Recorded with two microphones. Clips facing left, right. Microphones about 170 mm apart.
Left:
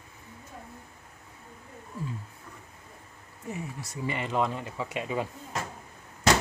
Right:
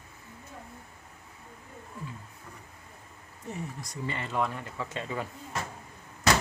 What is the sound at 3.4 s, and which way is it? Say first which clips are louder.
Speech: left 1 dB; 10° left (ahead or behind).